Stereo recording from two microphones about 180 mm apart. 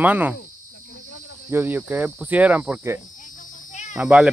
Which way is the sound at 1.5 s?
10° right (ahead or behind).